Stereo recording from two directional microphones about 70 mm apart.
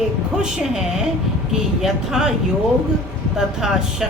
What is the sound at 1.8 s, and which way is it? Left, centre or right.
Speech, centre.